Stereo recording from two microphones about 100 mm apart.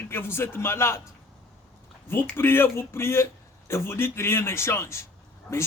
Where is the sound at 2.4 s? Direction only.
25° left (ahead or behind).